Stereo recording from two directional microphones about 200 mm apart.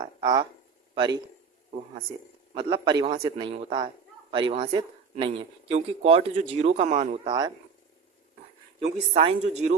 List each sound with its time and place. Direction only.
0.0 s a man's voice: 20° right (ahead or behind)
2.6 s a man's voice: 25° right (ahead or behind); by 7.2 s 40° right (ahead or behind)
7.3 s a man's voice: 20° right (ahead or behind)
8.8 s speech: 30° right (ahead or behind)